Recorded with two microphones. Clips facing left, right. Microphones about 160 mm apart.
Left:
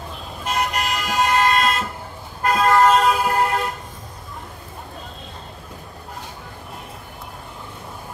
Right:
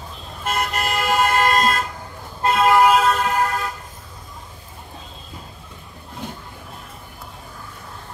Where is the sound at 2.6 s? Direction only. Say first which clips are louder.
Even; 10° right (ahead or behind).